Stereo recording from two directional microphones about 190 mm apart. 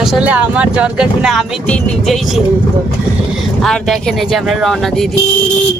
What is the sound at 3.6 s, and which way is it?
Speech, centre (ahead or behind).